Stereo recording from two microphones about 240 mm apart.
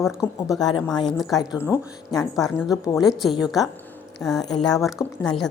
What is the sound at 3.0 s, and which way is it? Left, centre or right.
Speech, centre.